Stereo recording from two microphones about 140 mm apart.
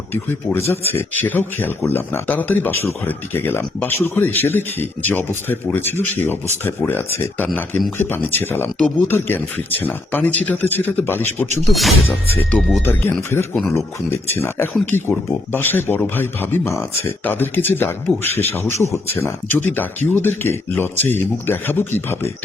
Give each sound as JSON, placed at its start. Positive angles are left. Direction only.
{"t": 0.1, "sound": "speech", "side_deg": 15}
{"t": 11.7, "sound": "speech", "side_deg": 0}
{"t": 12.0, "sound": "speech", "side_deg": 10}